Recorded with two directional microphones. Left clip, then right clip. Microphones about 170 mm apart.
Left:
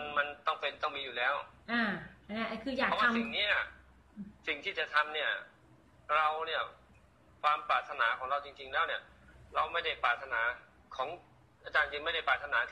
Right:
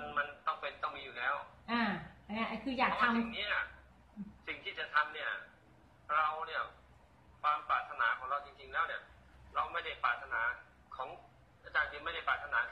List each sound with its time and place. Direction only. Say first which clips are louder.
0.0 s a sound: left 3 dB; 45° left (ahead or behind)
2.3 s a woman's voice: left 1 dB; 10° right (ahead or behind)
3.0 s a man's voice: left 3 dB; 45° left (ahead or behind)
11.7 s a man's voice: left 4 dB; 45° left (ahead or behind)